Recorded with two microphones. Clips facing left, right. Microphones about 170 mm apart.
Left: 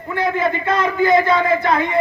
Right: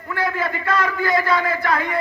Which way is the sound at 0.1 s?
20° left (ahead or behind).